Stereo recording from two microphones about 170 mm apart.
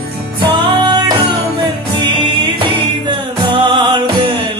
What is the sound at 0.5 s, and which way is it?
Music, 25° right (ahead or behind).